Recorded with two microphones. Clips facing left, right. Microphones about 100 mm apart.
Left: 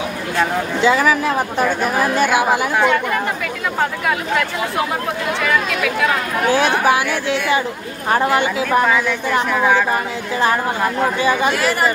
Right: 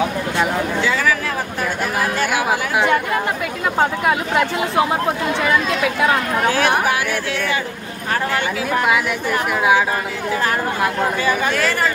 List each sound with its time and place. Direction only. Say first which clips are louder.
0.8 s speech: left 9 dB; 20° left (ahead or behind)
8.1 s speech: left 5 dB; 20° left (ahead or behind)
9.5 s a woman's voice: right 1 dB; 10° right (ahead or behind)
11.2 s speech: left 2 dB; 15° left (ahead or behind)